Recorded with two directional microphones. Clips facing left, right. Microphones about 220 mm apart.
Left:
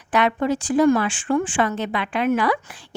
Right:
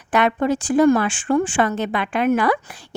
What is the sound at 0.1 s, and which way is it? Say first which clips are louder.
A woman's voice: right 2 dB; 50° right (ahead or behind).